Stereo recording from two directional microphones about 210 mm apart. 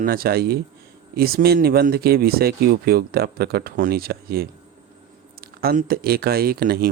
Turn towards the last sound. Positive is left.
turn(degrees=-45)  # may be behind; listen again after turning